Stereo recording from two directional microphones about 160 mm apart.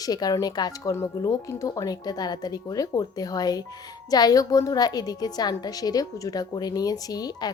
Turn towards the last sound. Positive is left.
turn(degrees=25)  # may be behind; listen again after turning